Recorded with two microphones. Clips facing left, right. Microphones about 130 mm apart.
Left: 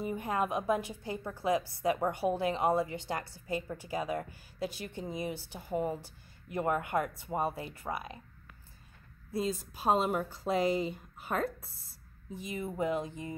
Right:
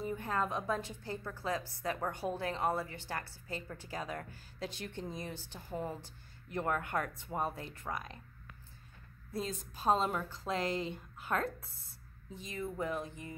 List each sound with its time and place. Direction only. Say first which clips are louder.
0.0 s a woman's voice: left 3 dB; 15° left (ahead or behind)
9.3 s a woman's voice: left 6 dB; 5° left (ahead or behind); by 13.4 s 20° left (ahead or behind)